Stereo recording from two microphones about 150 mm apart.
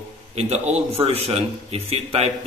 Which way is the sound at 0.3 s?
45° right (ahead or behind).